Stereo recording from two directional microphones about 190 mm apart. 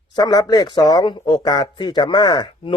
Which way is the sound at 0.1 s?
20° left (ahead or behind).